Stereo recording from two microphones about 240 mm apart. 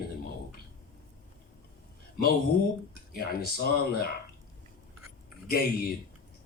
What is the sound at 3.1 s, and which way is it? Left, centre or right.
Speech, left.